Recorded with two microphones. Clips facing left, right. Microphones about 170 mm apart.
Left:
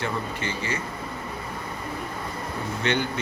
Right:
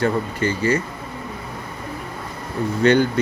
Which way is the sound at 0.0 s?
45° right (ahead or behind).